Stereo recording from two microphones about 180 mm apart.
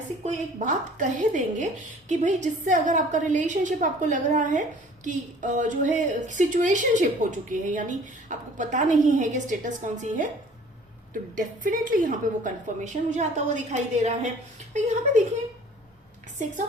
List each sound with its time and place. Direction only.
0.2 s a woman's voice: 40° right (ahead or behind)